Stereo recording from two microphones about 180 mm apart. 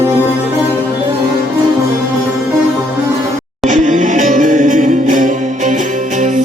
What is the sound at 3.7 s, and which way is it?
Music, 45° right (ahead or behind).